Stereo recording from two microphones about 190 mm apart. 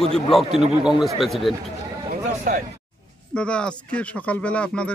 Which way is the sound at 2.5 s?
45° right (ahead or behind).